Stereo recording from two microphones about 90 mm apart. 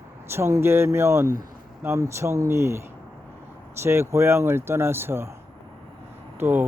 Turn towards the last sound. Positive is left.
turn(degrees=-25)  # may be behind; listen again after turning